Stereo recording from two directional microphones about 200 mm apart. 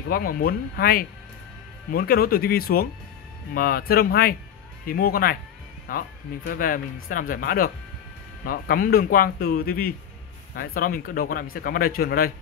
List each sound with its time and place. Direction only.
0.1 s speech: 45° left (ahead or behind)